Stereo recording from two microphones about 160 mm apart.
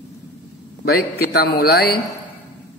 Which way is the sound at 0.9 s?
85° left.